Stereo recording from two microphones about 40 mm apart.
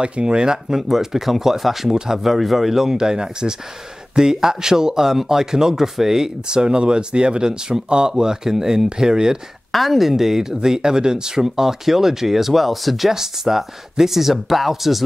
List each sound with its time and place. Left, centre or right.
0.0 s speech: right
9.7 s speech: centre